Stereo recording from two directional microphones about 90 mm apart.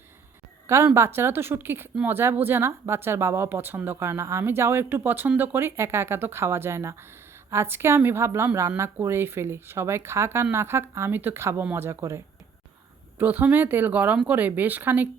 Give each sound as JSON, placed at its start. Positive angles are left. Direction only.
{"t": 0.9, "sound": "speech", "side_deg": -30}
{"t": 13.1, "sound": "speech", "side_deg": -20}